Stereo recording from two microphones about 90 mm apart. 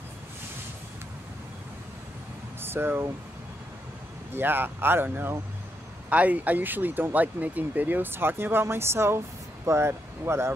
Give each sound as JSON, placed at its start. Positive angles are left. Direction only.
{"t": 2.6, "sound": "speech", "side_deg": -25}
{"t": 4.3, "sound": "speech", "side_deg": -25}